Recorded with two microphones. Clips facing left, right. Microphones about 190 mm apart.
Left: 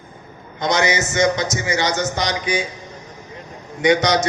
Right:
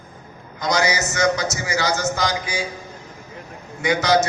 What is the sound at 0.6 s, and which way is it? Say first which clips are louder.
A man's voice: left 2 dB; 20° left (ahead or behind).